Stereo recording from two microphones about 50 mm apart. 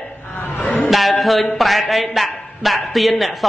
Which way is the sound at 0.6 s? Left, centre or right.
Left.